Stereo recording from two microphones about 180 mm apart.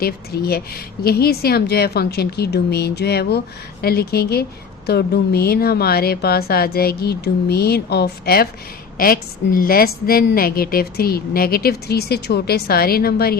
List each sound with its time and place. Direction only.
0.0 s speech: 60° left (ahead or behind)